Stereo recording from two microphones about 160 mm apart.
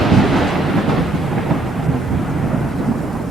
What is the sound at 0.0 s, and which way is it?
Thunder, centre (ahead or behind).